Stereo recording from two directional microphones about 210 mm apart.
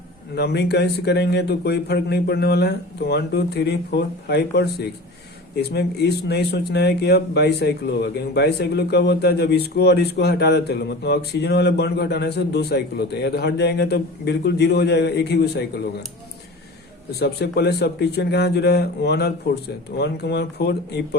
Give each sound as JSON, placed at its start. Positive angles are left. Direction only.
{"t": 0.3, "sound": "speech", "side_deg": 50}
{"t": 17.2, "sound": "speech", "side_deg": 50}